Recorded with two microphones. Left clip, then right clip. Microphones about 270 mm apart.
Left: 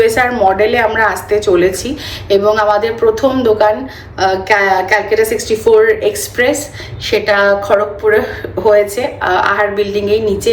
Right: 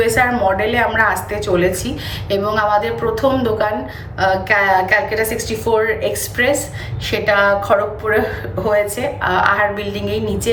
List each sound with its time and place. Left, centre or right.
0.0 s a woman's voice: centre
8.7 s a woman's voice: centre